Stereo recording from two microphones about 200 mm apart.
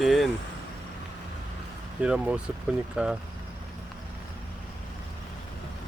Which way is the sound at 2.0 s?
5° right (ahead or behind).